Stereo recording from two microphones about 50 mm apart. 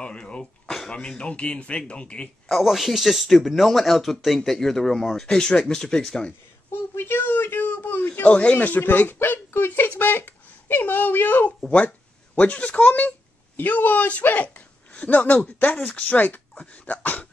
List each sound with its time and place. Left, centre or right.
0.0 s speech: left
2.5 s speech: centre
6.7 s a sound: left
8.3 s speech: left
8.5 s speech: left
9.5 s a sound: left
9.8 s speech: left
12.4 s speech: left